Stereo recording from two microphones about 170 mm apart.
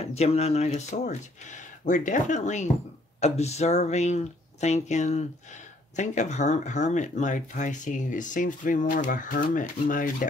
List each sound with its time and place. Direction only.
0.0 s speech: 40° left (ahead or behind)